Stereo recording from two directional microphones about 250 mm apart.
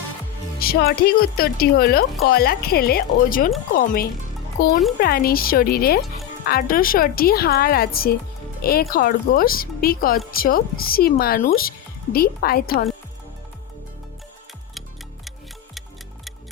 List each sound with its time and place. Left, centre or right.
0.6 s a woman's voice: left